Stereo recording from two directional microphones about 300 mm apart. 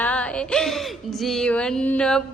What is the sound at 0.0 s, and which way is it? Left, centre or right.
A woman's voice, centre.